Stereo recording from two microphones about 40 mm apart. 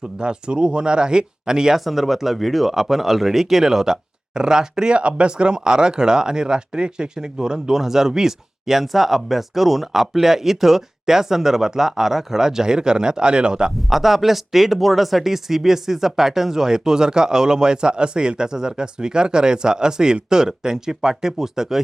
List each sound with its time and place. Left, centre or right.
0.2 s speech: right
1.8 s speech: centre
4.4 s speech: centre
13.9 s speech: centre